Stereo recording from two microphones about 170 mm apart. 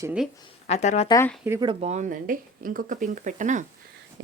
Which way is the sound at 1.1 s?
15° left (ahead or behind).